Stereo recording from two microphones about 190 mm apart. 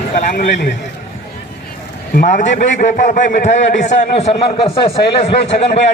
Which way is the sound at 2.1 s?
40° left (ahead or behind).